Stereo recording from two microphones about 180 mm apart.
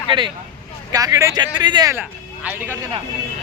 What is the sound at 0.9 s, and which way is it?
Speech, 20° right (ahead or behind).